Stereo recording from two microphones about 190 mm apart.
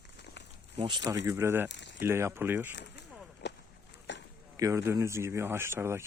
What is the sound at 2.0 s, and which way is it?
Speech, 15° right (ahead or behind).